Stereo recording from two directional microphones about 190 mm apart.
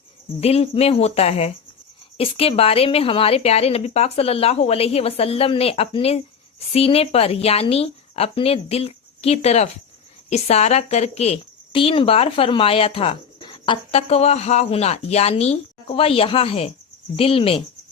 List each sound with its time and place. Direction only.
0.3 s speech: 30° left (ahead or behind)